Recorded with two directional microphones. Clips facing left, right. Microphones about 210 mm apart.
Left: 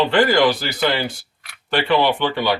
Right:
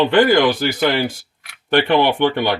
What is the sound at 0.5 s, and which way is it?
Speech, 50° right (ahead or behind).